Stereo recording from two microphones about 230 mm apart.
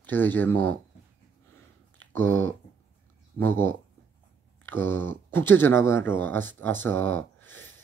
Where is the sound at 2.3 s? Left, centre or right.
Right.